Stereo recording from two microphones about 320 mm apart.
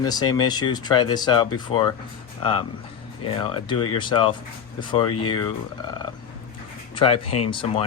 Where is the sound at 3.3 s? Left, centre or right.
Centre.